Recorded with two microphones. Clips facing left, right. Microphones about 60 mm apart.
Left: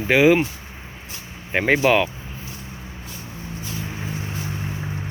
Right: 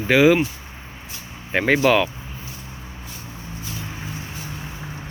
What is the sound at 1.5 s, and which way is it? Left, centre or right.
Speech, centre.